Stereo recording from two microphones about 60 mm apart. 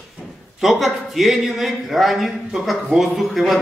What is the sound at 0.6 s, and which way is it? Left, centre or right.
A man's voice, centre.